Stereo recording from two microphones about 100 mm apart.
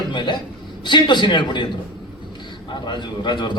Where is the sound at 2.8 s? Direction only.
50° left (ahead or behind).